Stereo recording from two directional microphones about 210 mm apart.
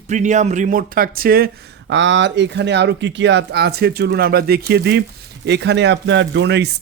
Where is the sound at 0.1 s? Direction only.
35° right (ahead or behind).